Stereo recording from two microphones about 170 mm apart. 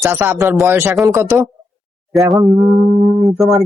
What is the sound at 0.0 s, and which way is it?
Speech, 10° right (ahead or behind).